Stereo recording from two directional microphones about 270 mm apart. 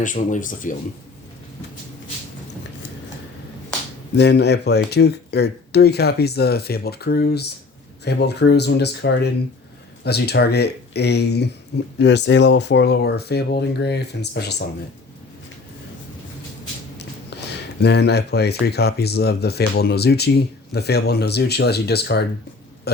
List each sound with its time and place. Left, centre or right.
0.0 s speech: left
4.1 s speech: left
17.8 s speech: left